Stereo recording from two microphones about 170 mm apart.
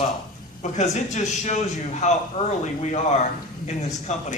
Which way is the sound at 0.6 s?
45° left (ahead or behind).